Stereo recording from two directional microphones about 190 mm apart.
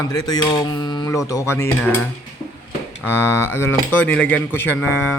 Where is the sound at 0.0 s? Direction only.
20° left (ahead or behind).